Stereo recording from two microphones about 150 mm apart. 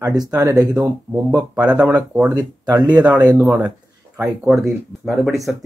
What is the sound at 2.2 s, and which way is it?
Speech, 20° right (ahead or behind).